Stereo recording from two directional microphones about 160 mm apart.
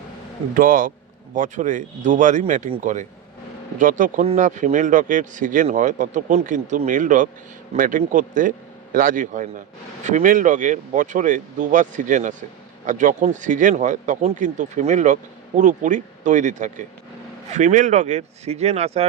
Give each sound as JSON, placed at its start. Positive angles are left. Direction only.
{"t": 0.5, "sound": "a man's voice", "side_deg": -60}